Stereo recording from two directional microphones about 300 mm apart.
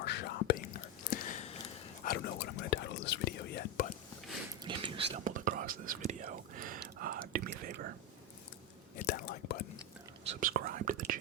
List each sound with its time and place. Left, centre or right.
0.0 s whispering: left
1.1 s a sound: left
2.0 s whispering: left
4.6 s whispering: centre
9.0 s whispering: left
10.2 s whispering: right